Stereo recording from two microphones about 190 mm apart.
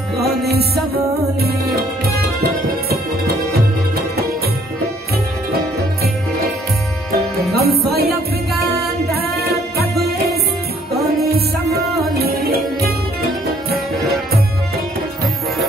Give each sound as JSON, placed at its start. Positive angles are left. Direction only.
{"t": 7.5, "sound": "music", "side_deg": -55}